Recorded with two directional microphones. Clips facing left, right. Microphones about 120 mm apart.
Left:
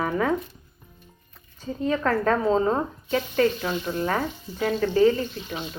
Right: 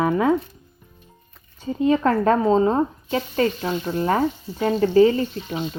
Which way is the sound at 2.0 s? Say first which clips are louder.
Right 1 dB; 30° right (ahead or behind).